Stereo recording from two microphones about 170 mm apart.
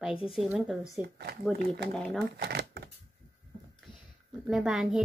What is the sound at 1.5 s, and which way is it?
Speech, 75° right (ahead or behind).